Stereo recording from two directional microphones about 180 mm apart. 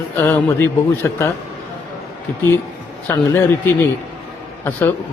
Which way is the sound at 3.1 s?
10° left (ahead or behind).